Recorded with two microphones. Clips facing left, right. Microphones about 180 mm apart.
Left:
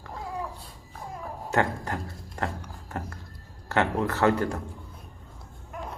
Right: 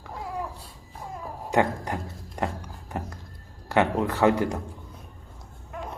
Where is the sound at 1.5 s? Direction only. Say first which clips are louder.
Right 3 dB; 15° right (ahead or behind).